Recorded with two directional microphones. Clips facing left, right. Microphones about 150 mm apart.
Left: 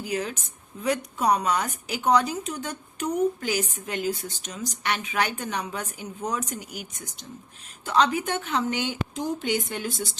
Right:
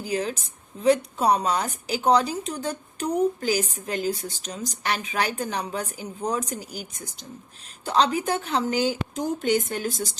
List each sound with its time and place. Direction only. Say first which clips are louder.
0.0 s speech: right 2 dB; 35° right (ahead or behind)